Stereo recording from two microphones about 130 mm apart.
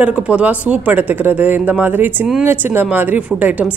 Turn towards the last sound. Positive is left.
turn(degrees=-10)  # may be behind; listen again after turning